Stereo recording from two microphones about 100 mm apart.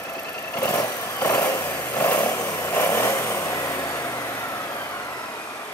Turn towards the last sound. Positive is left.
turn(degrees=30)  # may be behind; listen again after turning